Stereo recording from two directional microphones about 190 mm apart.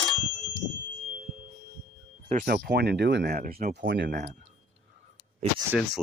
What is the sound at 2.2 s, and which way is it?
Speech, 55° right (ahead or behind).